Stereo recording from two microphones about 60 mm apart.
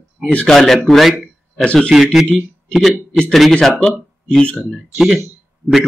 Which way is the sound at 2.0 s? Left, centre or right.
Centre.